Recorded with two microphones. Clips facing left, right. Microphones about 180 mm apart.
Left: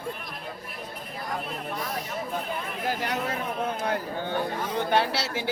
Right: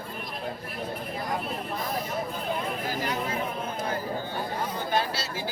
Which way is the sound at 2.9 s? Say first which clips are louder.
Left 5 dB; 65° left (ahead or behind).